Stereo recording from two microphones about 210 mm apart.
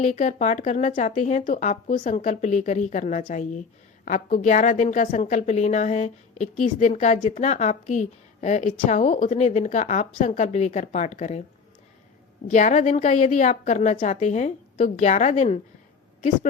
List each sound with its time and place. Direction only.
0.0 s a woman's voice: 35° left (ahead or behind)
12.5 s a woman's voice: 35° left (ahead or behind)